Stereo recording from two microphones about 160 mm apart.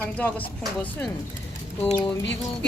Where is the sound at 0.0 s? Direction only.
10° left (ahead or behind).